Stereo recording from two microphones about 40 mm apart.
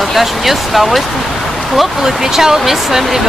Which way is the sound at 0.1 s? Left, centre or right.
Centre.